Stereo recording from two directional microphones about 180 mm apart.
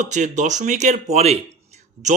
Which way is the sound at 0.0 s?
40° right (ahead or behind).